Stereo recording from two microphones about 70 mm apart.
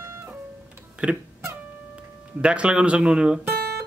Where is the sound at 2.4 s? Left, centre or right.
Centre.